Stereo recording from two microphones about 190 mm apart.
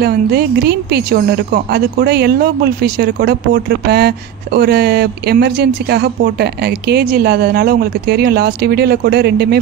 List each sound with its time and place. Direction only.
0.0 s speech: 55° right (ahead or behind)